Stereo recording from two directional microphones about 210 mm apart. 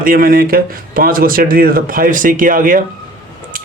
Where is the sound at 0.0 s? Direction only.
40° right (ahead or behind).